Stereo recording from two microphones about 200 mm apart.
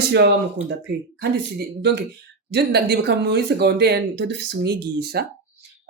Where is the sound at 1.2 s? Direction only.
55° right (ahead or behind).